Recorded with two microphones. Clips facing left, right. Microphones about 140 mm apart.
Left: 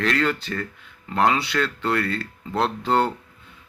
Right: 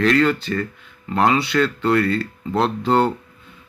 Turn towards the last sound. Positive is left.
turn(degrees=-5)  # may be behind; listen again after turning